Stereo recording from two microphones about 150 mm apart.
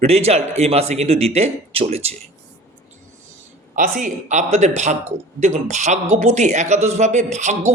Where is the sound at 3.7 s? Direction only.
60° right (ahead or behind).